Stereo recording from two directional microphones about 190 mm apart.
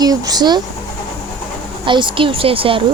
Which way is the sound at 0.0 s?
20° right (ahead or behind).